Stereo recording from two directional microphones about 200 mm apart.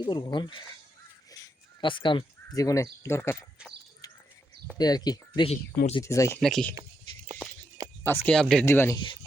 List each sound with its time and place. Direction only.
0.0 s speech: 20° left (ahead or behind)
3.6 s a sound: 5° right (ahead or behind)
4.8 s speech: 20° left (ahead or behind)
5.5 s speech: 30° left (ahead or behind)
6.0 s speech: 15° left (ahead or behind)
6.4 s speech: 5° left (ahead or behind)
8.0 s speech: 10° left (ahead or behind)